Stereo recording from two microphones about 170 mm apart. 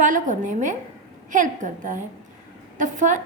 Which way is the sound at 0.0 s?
50° right (ahead or behind).